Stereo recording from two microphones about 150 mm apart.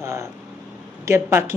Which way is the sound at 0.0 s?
20° right (ahead or behind).